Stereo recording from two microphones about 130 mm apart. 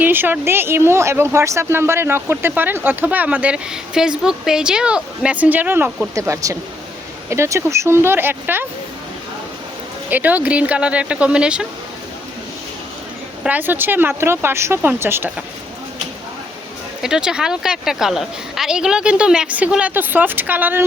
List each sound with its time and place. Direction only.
0.0 s speech: 15° right (ahead or behind)
10.1 s speech: 15° right (ahead or behind)
13.4 s speech: 15° right (ahead or behind)
17.0 s speech: 5° right (ahead or behind)